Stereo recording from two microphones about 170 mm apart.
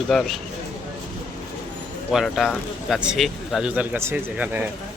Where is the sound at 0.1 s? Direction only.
Centre (ahead or behind).